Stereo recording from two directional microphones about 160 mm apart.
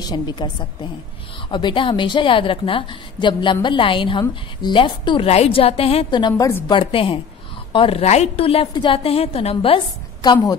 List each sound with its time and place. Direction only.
0.0 s a woman's voice: 25° left (ahead or behind)
6.7 s a woman's voice: 35° left (ahead or behind)
10.2 s a woman's voice: 25° left (ahead or behind)